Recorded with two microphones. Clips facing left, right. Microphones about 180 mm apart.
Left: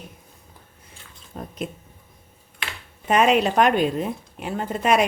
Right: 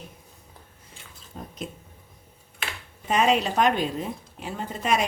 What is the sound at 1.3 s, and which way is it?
Speech, 60° left (ahead or behind).